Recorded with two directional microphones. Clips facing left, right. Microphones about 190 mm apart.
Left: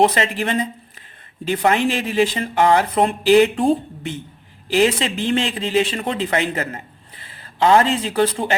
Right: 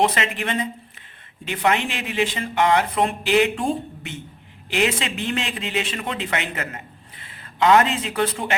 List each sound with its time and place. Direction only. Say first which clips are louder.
0.0 s speech: left 4 dB; 35° left (ahead or behind)